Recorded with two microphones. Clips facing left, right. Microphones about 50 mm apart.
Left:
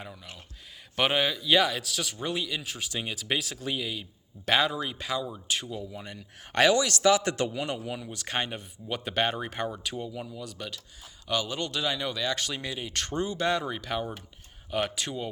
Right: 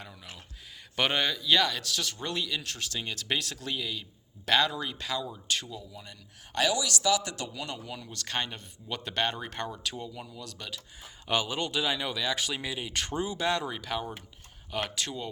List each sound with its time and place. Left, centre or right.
0.9 s speech: centre
5.8 s speech: left
7.6 s speech: left
11.0 s speech: right
11.5 s speech: centre